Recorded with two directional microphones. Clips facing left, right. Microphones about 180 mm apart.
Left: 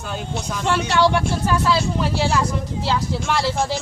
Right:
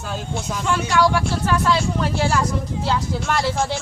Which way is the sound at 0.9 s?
25° left (ahead or behind).